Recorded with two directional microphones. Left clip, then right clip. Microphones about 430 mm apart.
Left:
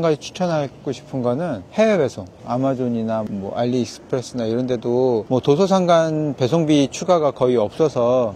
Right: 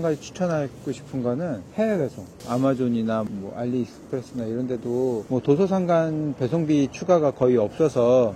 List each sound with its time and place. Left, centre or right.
0.0 s speech: left
2.4 s speech: centre
3.5 s speech: left; by 8.3 s centre